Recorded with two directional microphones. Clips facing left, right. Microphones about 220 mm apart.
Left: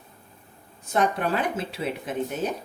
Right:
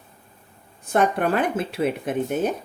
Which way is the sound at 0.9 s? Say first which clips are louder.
Right 4 dB; 55° right (ahead or behind).